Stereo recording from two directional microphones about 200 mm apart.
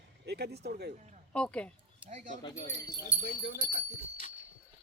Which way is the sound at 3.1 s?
40° left (ahead or behind).